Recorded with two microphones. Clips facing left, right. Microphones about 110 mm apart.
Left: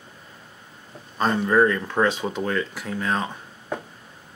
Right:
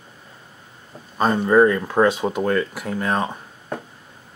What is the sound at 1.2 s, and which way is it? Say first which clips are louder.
Speech: right 4 dB; 10° right (ahead or behind).